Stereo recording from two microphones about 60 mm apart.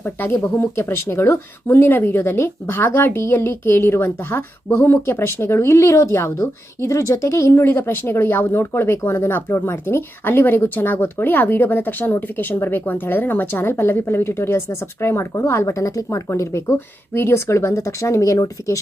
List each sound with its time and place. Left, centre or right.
0.0 s speech: left